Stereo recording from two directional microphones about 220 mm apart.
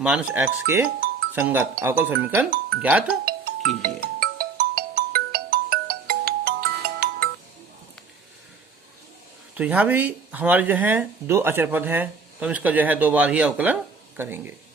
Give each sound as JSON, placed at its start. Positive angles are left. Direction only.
{"t": 0.0, "sound": "speech", "side_deg": -5}
{"t": 3.2, "sound": "music", "side_deg": -45}
{"t": 3.8, "sound": "ringtone", "side_deg": -40}
{"t": 9.6, "sound": "speech", "side_deg": -5}